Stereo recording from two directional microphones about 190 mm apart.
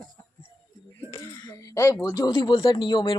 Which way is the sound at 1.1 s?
20° left (ahead or behind).